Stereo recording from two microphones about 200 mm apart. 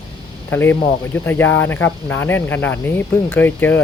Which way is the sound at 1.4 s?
75° left (ahead or behind).